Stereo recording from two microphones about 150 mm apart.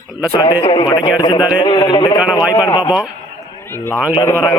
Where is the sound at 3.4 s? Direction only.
15° left (ahead or behind).